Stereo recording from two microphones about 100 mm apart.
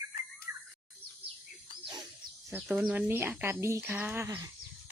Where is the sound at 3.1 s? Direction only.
25° right (ahead or behind).